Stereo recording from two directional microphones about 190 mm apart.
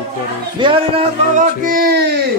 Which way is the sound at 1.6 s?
50° right (ahead or behind).